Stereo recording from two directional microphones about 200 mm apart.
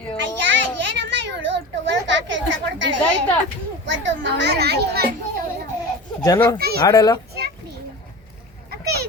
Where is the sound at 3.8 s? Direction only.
65° right (ahead or behind).